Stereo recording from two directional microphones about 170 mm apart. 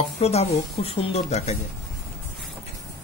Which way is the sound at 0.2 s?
40° left (ahead or behind).